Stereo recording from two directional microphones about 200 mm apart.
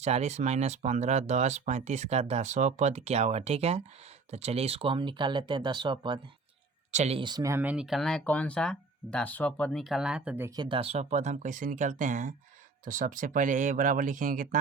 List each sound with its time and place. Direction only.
0.0 s speech: 35° right (ahead or behind)